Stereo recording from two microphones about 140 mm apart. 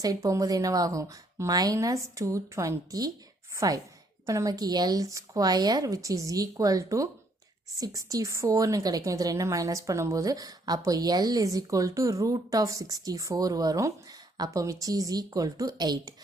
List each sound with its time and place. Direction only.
0.0 s a woman's voice: 25° right (ahead or behind)